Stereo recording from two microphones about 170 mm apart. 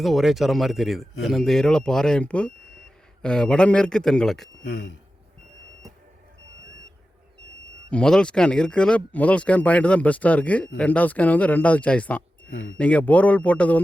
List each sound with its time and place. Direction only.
0.0 s speech: centre (ahead or behind)
4.6 s speech: 90° left
7.9 s speech: 5° left (ahead or behind)